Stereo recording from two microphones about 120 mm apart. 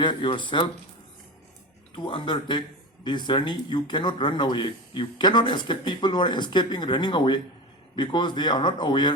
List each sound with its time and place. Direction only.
0.0 s speech: 45° left (ahead or behind)
2.0 s speech: 40° left (ahead or behind)